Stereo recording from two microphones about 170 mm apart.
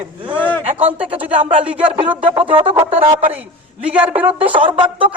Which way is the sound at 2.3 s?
30° right (ahead or behind).